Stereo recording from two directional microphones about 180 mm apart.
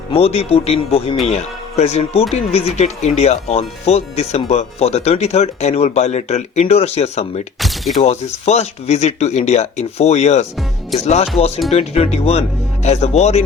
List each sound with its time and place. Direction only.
0.1 s speech: 35° left (ahead or behind)
7.6 s a sound: centre (ahead or behind)
8.0 s speech: 35° left (ahead or behind)